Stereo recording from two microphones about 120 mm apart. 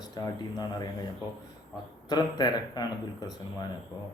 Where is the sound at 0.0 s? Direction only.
35° left (ahead or behind).